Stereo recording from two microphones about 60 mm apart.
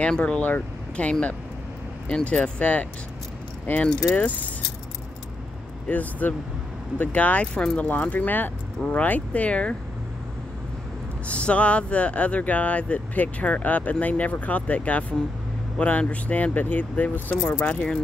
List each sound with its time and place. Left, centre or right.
0.0 s speech: centre
0.4 s speech: left
1.0 s speech: left
5.9 s speech: left
11.2 s speech: centre